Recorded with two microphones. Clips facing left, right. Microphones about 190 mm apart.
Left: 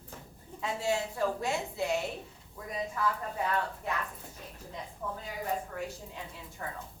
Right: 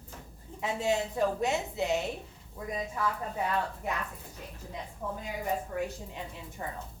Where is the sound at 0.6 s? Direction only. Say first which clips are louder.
Right 2 dB; 20° right (ahead or behind).